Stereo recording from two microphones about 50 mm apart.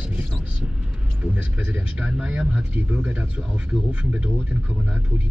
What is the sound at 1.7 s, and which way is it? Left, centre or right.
Speech, right.